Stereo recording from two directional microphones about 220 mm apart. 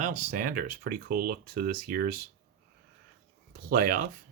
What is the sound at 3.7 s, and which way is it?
Speech, 40° right (ahead or behind).